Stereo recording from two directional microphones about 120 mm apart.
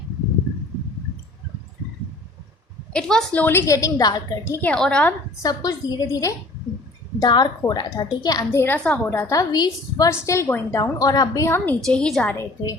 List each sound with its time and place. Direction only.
2.9 s a woman's voice: 5° left (ahead or behind)
3.4 s a woman's voice: 20° left (ahead or behind)
4.6 s a woman's voice: 10° left (ahead or behind)
5.4 s a woman's voice: 30° left (ahead or behind)
8.5 s a woman's voice: 15° left (ahead or behind)
9.0 s a woman's voice: 20° left (ahead or behind)
11.8 s a woman's voice: 5° left (ahead or behind)